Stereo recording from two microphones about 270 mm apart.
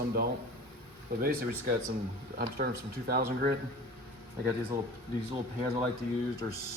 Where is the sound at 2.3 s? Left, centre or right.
Right.